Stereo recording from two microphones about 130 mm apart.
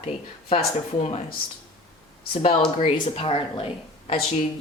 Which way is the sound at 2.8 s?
50° left (ahead or behind).